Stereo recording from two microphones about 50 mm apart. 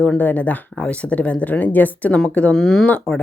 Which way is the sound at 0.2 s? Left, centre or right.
Left.